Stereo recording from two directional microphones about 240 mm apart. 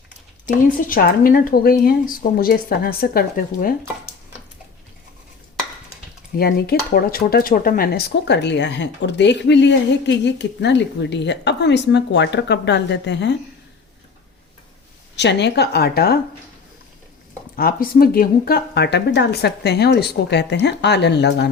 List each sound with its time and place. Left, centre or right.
0.4 s speech: left
6.3 s speech: left
15.1 s speech: left
17.6 s speech: left